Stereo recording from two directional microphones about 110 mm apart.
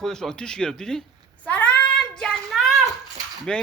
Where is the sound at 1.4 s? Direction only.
10° left (ahead or behind).